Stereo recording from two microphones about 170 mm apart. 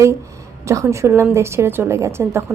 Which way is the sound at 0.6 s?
15° right (ahead or behind).